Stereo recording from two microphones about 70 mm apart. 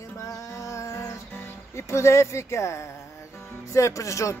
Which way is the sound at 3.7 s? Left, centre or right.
Left.